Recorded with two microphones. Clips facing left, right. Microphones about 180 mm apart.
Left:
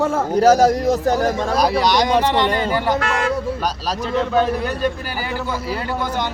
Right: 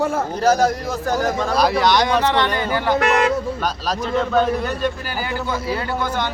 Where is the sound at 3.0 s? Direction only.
20° right (ahead or behind).